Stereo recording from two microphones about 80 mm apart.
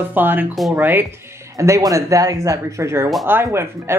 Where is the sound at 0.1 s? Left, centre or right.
Right.